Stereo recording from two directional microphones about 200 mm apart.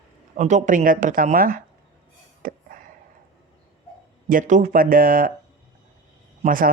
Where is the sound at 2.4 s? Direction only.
45° right (ahead or behind).